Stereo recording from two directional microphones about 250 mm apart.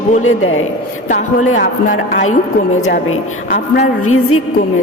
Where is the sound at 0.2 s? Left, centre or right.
Left.